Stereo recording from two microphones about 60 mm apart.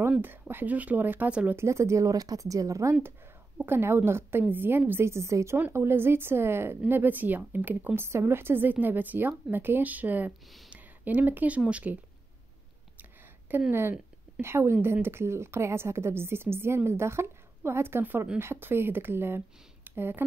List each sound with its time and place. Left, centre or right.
0.2 s a woman's voice: right
1.5 s speech: right
3.6 s a woman's voice: right
5.7 s a woman's voice: right
6.9 s a woman's voice: right
13.7 s a woman's voice: right